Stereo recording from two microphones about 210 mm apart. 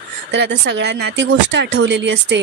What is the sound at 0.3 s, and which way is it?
Speech, 55° right (ahead or behind).